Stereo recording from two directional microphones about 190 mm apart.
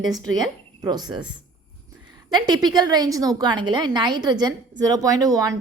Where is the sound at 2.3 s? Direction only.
20° right (ahead or behind).